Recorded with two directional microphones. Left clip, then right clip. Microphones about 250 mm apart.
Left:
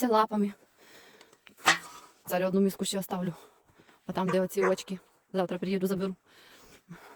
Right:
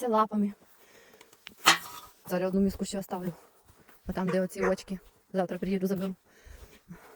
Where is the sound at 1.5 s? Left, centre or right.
Right.